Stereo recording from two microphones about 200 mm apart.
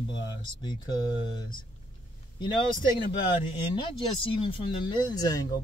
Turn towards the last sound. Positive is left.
turn(degrees=20)  # may be behind; listen again after turning